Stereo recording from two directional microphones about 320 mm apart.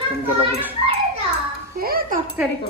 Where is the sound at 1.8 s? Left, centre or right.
Right.